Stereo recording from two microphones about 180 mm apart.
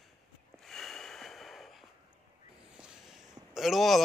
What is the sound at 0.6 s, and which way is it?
Snort, centre (ahead or behind).